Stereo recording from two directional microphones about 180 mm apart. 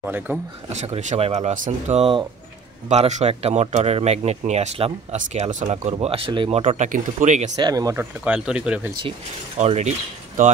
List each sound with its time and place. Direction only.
0.0 s speech: 10° right (ahead or behind)
0.7 s speech: 35° right (ahead or behind)
7.5 s speech: 20° right (ahead or behind)
8.0 s speech: 5° right (ahead or behind)
9.6 s speech: 40° right (ahead or behind)